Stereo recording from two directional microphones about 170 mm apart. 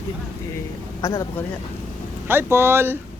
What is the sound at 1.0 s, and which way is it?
Speech, 15° left (ahead or behind).